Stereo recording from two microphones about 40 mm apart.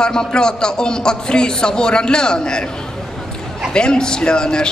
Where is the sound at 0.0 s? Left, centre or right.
Centre.